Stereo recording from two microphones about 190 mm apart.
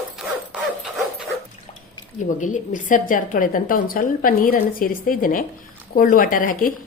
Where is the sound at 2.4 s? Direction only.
40° left (ahead or behind).